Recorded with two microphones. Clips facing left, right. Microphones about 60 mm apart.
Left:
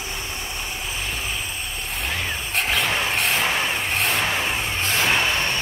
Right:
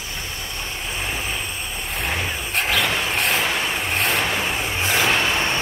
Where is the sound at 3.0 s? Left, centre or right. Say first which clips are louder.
Right 1 dB; centre.